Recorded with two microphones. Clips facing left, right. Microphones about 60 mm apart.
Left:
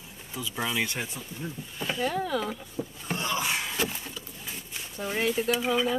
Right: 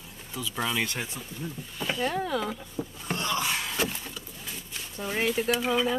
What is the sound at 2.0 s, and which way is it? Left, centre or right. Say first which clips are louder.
Speech: left 1 dB; right.